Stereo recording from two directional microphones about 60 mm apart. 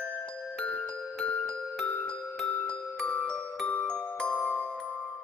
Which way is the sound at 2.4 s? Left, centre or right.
Left.